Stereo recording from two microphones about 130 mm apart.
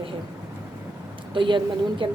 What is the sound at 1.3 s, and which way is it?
Speech, 40° right (ahead or behind).